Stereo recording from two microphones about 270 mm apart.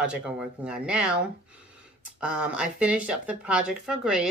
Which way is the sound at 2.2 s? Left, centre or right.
Centre.